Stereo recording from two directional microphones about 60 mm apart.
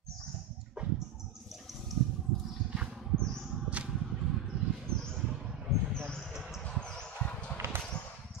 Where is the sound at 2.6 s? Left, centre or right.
Centre.